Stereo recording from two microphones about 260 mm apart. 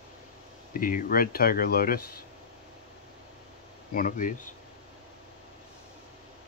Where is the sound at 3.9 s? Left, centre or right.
Left.